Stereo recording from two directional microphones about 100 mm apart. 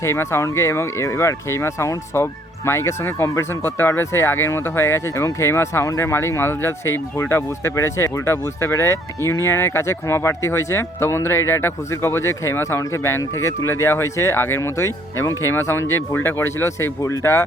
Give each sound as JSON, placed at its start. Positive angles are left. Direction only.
{"t": 0.0, "sound": "speech", "side_deg": 25}